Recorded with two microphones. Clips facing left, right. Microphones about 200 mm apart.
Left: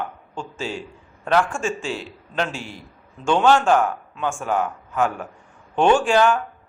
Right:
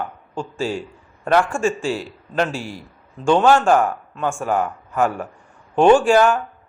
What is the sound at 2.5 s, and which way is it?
Speech, 40° right (ahead or behind).